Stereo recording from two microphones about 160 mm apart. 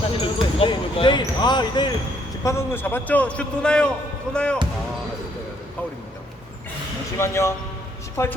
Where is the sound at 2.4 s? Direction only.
15° left (ahead or behind).